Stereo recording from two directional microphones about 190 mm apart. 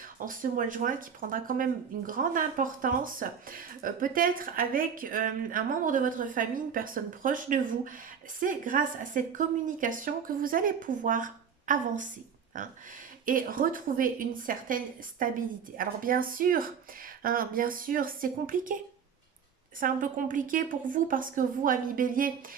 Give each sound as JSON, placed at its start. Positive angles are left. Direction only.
{"t": 0.3, "sound": "speech", "side_deg": -45}
{"t": 19.8, "sound": "speech", "side_deg": -45}